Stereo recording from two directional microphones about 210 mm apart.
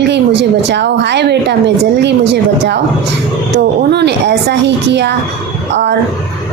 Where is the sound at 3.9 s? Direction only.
55° right (ahead or behind).